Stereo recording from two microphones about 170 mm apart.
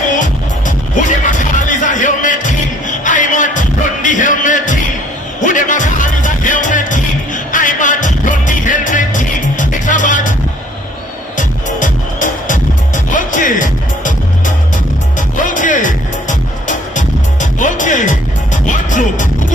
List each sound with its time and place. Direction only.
0.1 s music: 50° left (ahead or behind)
11.3 s music: 50° left (ahead or behind)